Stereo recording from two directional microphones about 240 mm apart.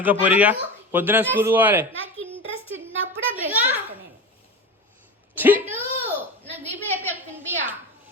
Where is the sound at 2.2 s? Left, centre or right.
Left.